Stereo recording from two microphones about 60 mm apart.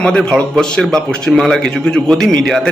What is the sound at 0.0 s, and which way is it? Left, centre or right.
A man's voice, centre.